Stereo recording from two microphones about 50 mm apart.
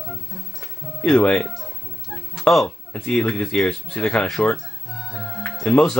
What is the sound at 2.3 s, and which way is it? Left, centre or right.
Speech, centre.